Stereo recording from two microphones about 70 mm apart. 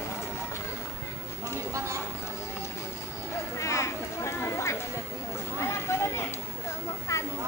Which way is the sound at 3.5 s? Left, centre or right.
Left.